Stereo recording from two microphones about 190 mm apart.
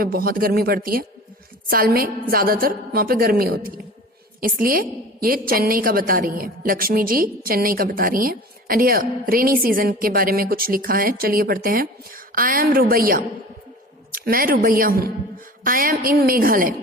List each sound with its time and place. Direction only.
0.0 s a woman's voice: 50° right (ahead or behind)